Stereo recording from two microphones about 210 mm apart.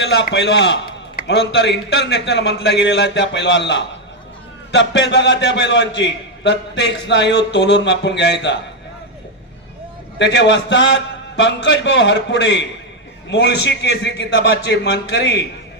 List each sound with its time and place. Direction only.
0.0 s a man's voice: 55° left (ahead or behind)
10.2 s a man's voice: 55° left (ahead or behind)